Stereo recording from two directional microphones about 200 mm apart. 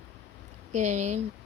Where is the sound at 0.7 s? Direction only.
35° right (ahead or behind).